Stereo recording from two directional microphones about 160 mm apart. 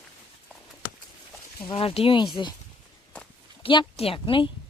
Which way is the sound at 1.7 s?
35° left (ahead or behind).